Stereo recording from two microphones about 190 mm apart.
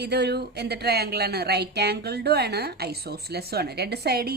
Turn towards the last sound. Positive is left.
turn(degrees=-55)  # may be behind; listen again after turning